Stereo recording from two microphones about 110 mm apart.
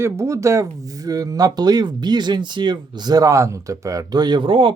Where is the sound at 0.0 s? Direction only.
25° right (ahead or behind).